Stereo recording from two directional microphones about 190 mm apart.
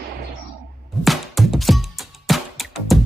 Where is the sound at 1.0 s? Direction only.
Centre (ahead or behind).